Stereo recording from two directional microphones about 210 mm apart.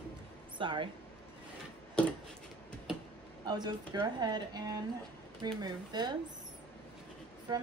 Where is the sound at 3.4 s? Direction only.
20° right (ahead or behind).